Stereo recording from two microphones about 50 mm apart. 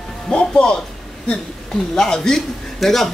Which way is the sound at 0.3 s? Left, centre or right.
Centre.